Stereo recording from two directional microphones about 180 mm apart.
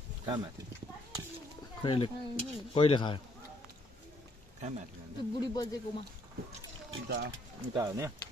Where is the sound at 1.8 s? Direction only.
30° left (ahead or behind).